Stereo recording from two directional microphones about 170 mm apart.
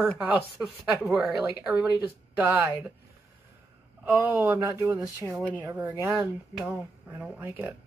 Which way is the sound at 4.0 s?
10° right (ahead or behind).